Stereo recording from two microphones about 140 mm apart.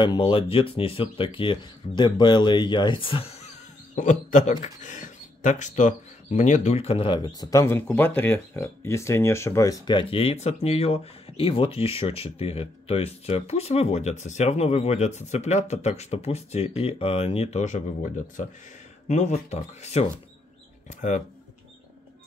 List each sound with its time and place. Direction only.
0.0 s speech: 35° left (ahead or behind)
9.9 s speech: 40° left (ahead or behind)
19.0 s speech: 55° left (ahead or behind)
21.0 s speech: 60° left (ahead or behind)